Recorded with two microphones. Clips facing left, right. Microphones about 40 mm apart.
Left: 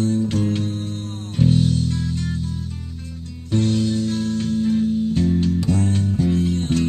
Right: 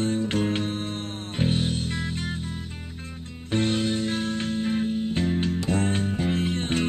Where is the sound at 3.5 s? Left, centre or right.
Right.